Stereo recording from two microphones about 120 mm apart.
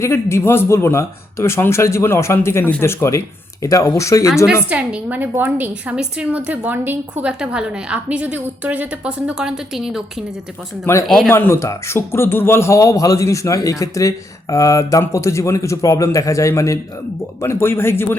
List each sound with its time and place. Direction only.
0.0 s a man's voice: 25° left (ahead or behind)
4.7 s a woman's voice: 10° right (ahead or behind)
11.3 s a man's voice: 20° left (ahead or behind)